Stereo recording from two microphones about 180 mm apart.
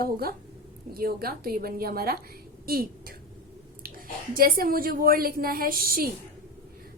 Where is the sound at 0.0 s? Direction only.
55° right (ahead or behind).